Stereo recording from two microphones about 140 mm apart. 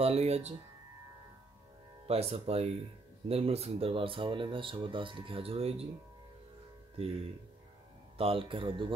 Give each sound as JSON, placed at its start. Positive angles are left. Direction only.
{"t": 0.0, "sound": "speech", "side_deg": -50}
{"t": 2.0, "sound": "speech", "side_deg": -45}
{"t": 7.0, "sound": "speech", "side_deg": -45}
{"t": 8.2, "sound": "speech", "side_deg": -40}